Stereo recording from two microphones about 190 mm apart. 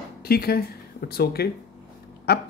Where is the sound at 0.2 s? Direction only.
55° left (ahead or behind).